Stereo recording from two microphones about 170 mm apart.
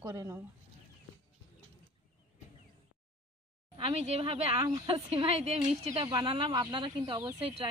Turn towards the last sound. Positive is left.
turn(degrees=-25)  # may be behind; listen again after turning